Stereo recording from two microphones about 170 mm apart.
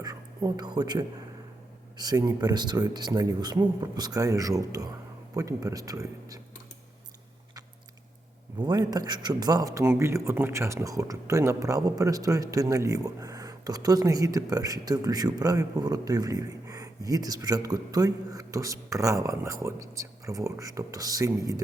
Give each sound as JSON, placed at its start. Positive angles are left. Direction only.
{"t": 0.0, "sound": "a woman's voice", "side_deg": -20}
{"t": 8.5, "sound": "speech", "side_deg": -25}